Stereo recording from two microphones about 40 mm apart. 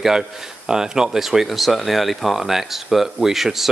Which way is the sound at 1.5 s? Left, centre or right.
Centre.